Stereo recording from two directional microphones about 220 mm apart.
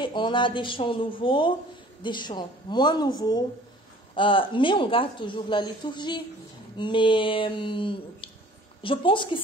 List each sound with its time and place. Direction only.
0.0 s speech: 20° left (ahead or behind)